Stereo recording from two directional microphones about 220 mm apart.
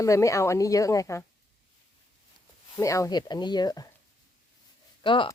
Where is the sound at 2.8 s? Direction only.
15° left (ahead or behind).